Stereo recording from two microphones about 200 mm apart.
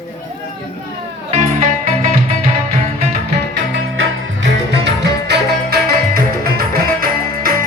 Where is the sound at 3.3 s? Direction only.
65° right (ahead or behind).